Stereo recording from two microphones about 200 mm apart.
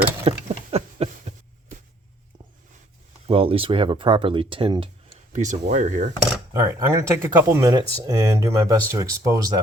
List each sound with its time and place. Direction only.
0.3 s a sound: 30° right (ahead or behind)
3.2 s speech: 30° right (ahead or behind)
5.3 s speech: 40° right (ahead or behind)
6.5 s speech: 15° right (ahead or behind)